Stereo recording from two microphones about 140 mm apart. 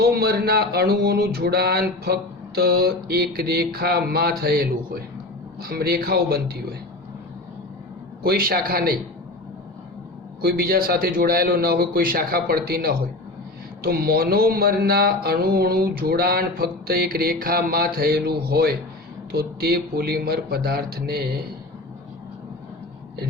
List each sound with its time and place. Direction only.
0.0 s speech: 90° right
8.2 s speech: 90° right
10.4 s speech: 90° right